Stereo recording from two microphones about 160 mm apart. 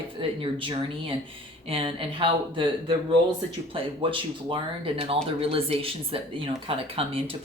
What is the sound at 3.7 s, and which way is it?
Speech, 35° right (ahead or behind).